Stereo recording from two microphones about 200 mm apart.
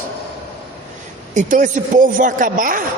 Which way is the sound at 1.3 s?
40° right (ahead or behind).